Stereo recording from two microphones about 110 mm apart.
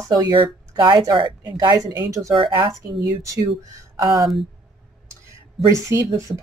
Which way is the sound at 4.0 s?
40° right (ahead or behind).